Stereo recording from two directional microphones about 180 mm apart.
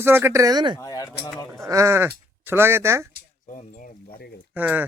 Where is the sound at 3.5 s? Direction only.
45° left (ahead or behind).